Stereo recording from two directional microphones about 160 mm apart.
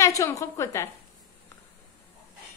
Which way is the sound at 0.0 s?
20° left (ahead or behind).